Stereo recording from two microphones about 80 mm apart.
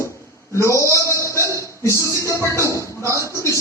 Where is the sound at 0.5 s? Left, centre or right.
Left.